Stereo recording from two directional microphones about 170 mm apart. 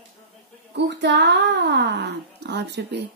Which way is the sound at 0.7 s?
90° right.